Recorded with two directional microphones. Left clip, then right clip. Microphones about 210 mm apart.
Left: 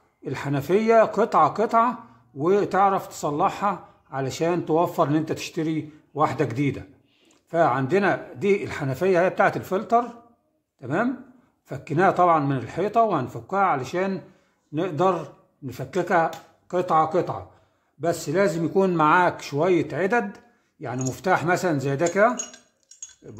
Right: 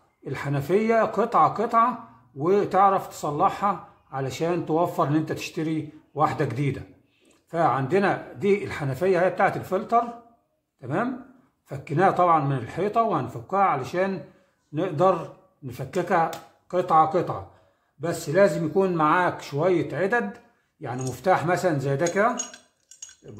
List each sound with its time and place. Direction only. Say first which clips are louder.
0.2 s speech: left 2 dB; 35° left (ahead or behind)